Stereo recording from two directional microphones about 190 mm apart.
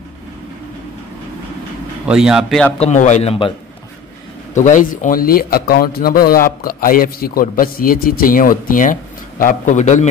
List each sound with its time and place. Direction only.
2.0 s speech: 5° right (ahead or behind)
2.8 s a man's voice: 40° left (ahead or behind)
4.6 s a man's voice: 40° left (ahead or behind)